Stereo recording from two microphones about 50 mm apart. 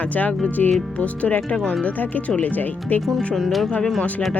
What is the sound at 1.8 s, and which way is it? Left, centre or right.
Speech, left.